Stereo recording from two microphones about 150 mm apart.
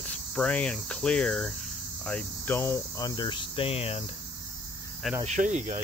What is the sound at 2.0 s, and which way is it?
Cricket, 10° left (ahead or behind).